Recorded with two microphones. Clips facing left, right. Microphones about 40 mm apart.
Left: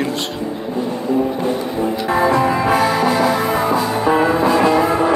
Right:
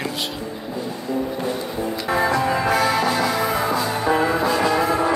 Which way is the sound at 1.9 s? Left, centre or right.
Left.